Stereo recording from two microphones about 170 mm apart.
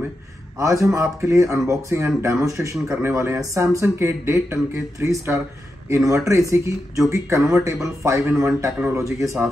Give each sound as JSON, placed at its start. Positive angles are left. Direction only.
{"t": 0.6, "sound": "speech", "side_deg": -20}